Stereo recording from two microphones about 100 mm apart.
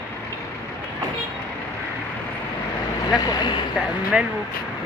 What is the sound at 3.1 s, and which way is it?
Vehicle, 40° left (ahead or behind).